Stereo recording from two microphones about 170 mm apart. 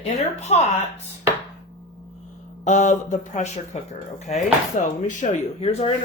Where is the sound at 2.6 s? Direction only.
45° left (ahead or behind).